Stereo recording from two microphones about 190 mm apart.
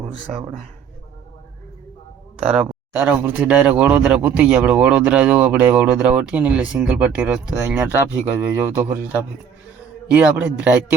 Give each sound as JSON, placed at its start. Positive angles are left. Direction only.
{"t": 2.4, "sound": "speech", "side_deg": -35}
{"t": 2.9, "sound": "speech", "side_deg": -10}
{"t": 10.1, "sound": "speech", "side_deg": -5}